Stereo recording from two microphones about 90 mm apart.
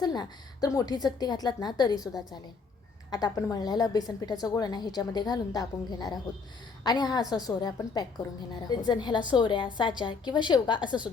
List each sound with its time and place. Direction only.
0.0 s a woman's voice: 50° left (ahead or behind)